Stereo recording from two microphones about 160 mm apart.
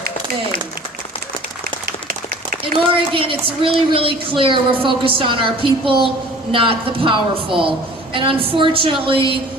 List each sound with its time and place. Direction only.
2.9 s a woman's voice: 35° right (ahead or behind)